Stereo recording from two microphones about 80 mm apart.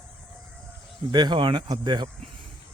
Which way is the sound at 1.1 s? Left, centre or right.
Right.